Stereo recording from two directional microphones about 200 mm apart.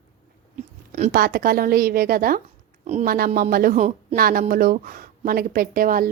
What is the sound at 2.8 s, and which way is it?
A woman's voice, 35° right (ahead or behind).